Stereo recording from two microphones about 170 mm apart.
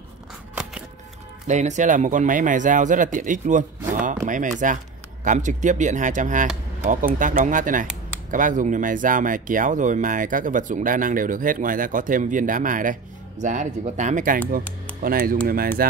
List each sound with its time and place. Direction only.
1.5 s speech: 45° right (ahead or behind)